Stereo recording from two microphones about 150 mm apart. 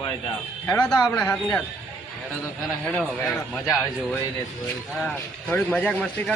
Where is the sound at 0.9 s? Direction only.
25° left (ahead or behind).